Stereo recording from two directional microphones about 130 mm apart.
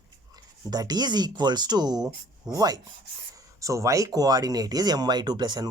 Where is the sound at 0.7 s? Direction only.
30° right (ahead or behind).